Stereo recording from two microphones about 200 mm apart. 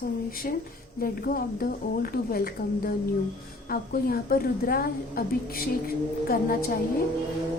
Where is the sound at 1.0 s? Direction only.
45° left (ahead or behind).